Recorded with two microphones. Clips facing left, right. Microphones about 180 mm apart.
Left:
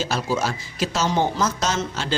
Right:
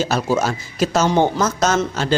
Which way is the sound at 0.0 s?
50° right (ahead or behind).